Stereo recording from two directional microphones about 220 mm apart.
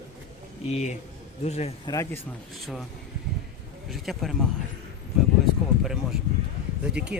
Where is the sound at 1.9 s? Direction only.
15° left (ahead or behind).